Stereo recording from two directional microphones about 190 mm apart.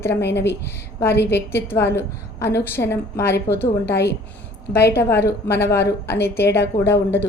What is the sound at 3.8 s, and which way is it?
A woman's voice, 60° left (ahead or behind).